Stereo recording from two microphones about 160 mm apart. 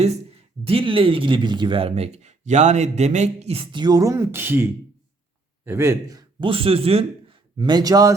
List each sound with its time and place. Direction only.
0.0 s speech: 40° right (ahead or behind); by 8.1 s 20° right (ahead or behind)